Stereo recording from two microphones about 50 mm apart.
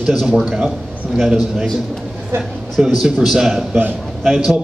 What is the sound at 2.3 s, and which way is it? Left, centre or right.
Speech, right.